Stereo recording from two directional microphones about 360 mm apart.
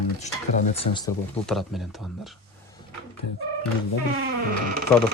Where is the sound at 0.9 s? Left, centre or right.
Centre.